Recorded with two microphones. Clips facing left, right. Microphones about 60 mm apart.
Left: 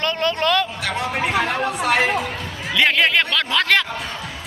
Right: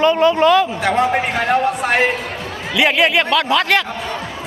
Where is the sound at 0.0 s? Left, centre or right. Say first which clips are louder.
Right 8 dB; centre.